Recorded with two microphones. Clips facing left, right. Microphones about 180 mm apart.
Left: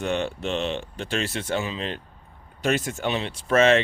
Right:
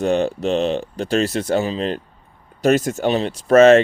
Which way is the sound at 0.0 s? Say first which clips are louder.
Right 8 dB; 35° right (ahead or behind).